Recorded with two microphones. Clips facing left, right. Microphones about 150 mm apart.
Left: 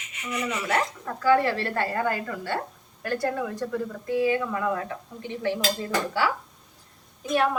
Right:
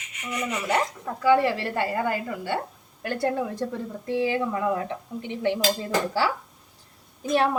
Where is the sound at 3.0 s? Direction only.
25° right (ahead or behind).